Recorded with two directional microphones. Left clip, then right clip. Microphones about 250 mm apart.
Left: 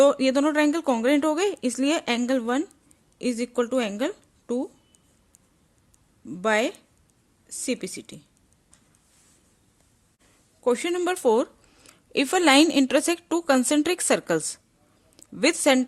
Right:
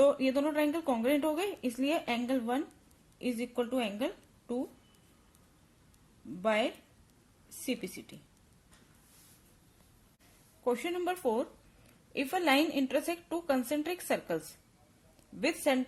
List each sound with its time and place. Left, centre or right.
0.0 s a woman's voice: left
6.4 s a woman's voice: left
10.6 s a woman's voice: left